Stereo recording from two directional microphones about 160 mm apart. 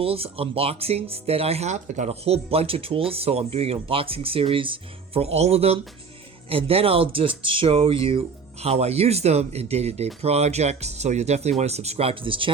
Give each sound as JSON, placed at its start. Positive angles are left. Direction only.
{"t": 0.0, "sound": "speech", "side_deg": -35}